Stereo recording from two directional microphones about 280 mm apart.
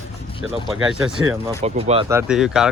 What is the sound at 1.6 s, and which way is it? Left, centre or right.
Speech, right.